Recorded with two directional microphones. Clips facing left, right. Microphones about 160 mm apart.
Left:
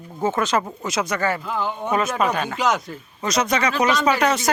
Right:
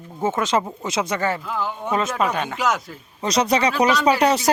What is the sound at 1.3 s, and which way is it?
Speech, 5° right (ahead or behind).